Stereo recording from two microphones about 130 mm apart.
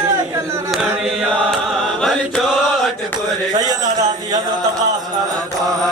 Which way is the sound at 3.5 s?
30° right (ahead or behind).